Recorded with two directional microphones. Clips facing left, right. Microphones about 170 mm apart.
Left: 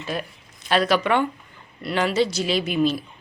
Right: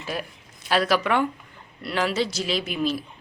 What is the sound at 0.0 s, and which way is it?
Speech, 5° right (ahead or behind).